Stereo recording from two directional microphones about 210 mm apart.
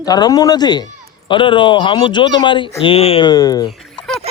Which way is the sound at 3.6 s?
5° left (ahead or behind).